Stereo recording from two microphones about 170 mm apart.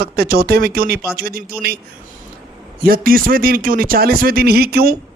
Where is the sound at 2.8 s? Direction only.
60° right (ahead or behind).